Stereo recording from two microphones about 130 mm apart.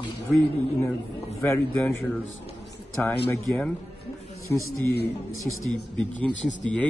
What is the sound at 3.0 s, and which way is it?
A man's voice, 20° left (ahead or behind).